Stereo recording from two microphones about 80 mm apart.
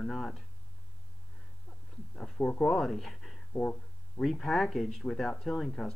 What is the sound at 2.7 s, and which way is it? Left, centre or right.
Speech, centre.